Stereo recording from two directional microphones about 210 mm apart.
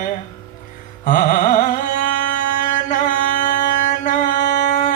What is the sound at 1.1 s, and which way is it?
Carnatic music, 40° left (ahead or behind).